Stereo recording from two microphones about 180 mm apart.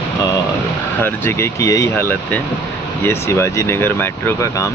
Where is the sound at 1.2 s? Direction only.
15° left (ahead or behind).